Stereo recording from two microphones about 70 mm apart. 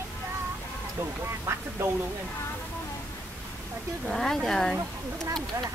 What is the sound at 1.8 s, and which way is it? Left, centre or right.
Speech, right.